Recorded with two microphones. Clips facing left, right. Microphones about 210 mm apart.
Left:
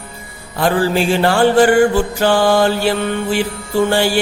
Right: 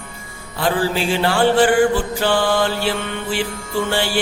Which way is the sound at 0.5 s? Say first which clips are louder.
Left 4 dB; 45° left (ahead or behind).